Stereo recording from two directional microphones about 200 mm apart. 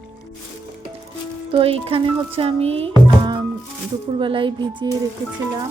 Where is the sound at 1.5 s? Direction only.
30° right (ahead or behind).